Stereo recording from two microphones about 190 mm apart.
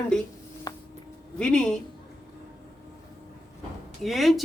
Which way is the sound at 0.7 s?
20° left (ahead or behind).